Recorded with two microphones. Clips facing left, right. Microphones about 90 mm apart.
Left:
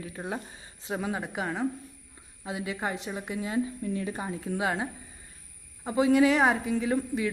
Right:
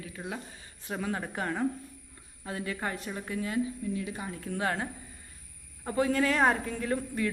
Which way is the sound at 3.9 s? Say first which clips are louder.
Left 3 dB; 35° left (ahead or behind).